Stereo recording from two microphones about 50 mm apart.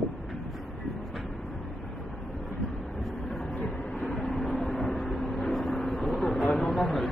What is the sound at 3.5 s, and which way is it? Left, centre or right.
Vehicle, left.